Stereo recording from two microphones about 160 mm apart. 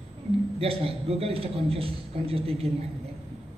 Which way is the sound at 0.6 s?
35° right (ahead or behind).